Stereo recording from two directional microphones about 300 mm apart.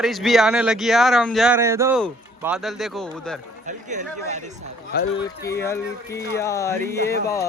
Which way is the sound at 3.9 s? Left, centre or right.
Right.